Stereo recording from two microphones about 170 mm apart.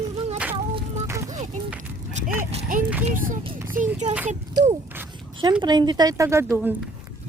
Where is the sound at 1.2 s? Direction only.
45° right (ahead or behind).